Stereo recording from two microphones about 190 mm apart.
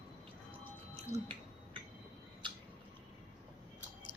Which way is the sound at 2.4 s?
25° right (ahead or behind).